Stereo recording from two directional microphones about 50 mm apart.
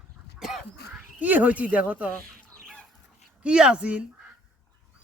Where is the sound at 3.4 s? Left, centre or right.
Centre.